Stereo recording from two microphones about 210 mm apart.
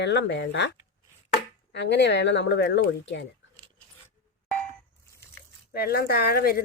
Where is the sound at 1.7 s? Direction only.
55° left (ahead or behind).